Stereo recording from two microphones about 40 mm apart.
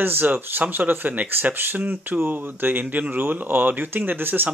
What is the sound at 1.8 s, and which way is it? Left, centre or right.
Speech, right.